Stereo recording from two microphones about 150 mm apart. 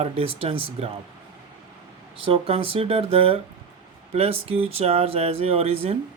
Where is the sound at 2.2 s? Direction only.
40° right (ahead or behind).